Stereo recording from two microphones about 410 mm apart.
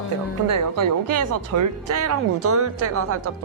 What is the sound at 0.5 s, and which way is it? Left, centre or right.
Speech, right.